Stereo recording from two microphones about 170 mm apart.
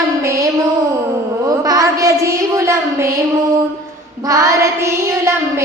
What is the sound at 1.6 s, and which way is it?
A woman's voice, 20° right (ahead or behind).